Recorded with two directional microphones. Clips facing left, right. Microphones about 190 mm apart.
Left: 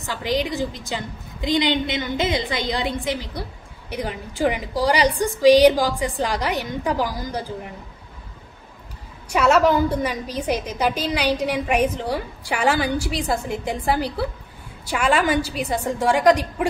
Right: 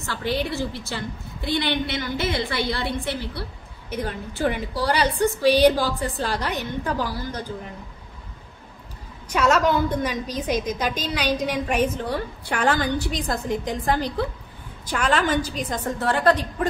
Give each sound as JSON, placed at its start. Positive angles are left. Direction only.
{"t": 0.0, "sound": "a woman's voice", "side_deg": 15}
{"t": 9.3, "sound": "a woman's voice", "side_deg": 10}